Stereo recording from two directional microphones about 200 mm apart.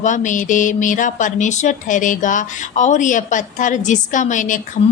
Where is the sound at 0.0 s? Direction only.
40° left (ahead or behind).